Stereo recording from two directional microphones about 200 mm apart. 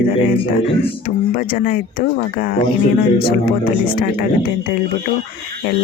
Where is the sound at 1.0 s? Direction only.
45° left (ahead or behind).